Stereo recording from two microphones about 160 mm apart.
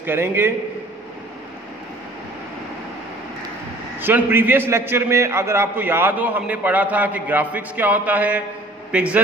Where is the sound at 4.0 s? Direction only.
15° right (ahead or behind).